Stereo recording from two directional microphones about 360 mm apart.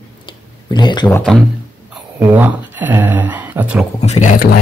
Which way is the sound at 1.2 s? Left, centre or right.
Centre.